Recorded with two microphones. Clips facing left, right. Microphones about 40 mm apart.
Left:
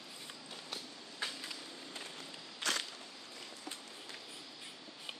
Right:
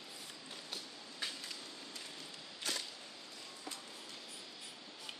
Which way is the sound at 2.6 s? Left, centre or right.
Left.